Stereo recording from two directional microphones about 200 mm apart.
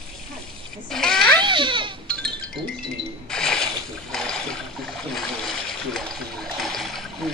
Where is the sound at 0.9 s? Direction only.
Centre (ahead or behind).